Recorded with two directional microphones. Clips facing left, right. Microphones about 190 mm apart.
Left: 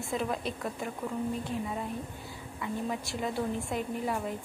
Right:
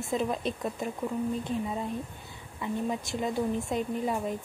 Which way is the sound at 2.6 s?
20° right (ahead or behind).